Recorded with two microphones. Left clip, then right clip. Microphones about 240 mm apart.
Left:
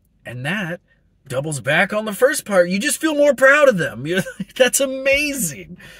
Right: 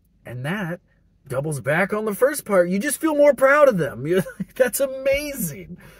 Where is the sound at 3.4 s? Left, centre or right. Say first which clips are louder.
Left 3 dB; centre.